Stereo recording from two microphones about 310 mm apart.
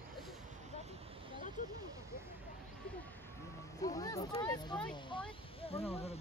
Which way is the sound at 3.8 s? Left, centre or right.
Centre.